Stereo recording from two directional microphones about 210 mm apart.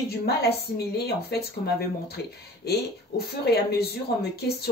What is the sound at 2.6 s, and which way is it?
Speech, 50° left (ahead or behind).